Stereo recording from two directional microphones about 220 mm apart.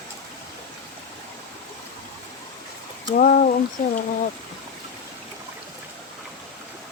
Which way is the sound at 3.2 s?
40° left (ahead or behind).